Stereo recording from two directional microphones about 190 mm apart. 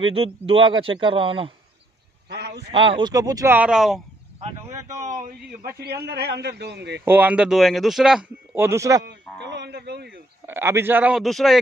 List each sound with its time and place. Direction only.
0.0 s speech: 30° right (ahead or behind)
2.2 s a sound: 60° right (ahead or behind)
2.7 s speech: 30° right (ahead or behind); by 4.0 s centre (ahead or behind)
6.0 s a man's voice: 60° right (ahead or behind)
7.1 s speech: 10° right (ahead or behind)
9.0 s speech: 65° right (ahead or behind)
10.4 s a man's voice: 10° right (ahead or behind)